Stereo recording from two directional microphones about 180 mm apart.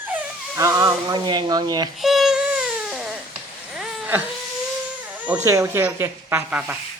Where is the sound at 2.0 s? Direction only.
Centre (ahead or behind).